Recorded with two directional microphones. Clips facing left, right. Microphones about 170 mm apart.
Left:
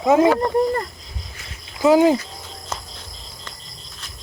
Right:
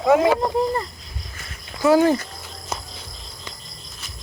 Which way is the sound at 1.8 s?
15° left (ahead or behind).